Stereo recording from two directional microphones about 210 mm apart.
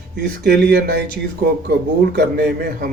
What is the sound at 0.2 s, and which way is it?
Speech, 50° right (ahead or behind).